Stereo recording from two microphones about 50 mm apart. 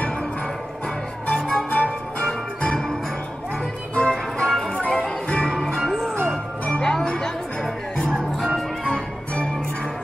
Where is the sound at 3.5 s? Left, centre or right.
Left; by 8.6 s centre.